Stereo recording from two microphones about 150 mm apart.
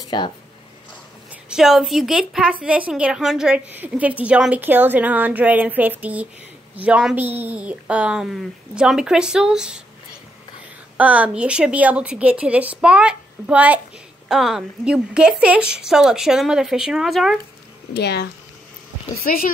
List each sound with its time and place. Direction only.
0.0 s a sound: 30° left (ahead or behind)
1.3 s a woman's voice: 5° right (ahead or behind)
11.0 s a woman's voice: 10° right (ahead or behind)
17.9 s speech: 90° left